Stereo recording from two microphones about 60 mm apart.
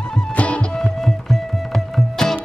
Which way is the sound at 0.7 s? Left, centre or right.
Centre.